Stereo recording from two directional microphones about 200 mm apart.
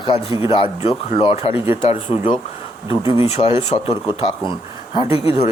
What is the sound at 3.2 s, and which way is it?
Speech, 30° left (ahead or behind).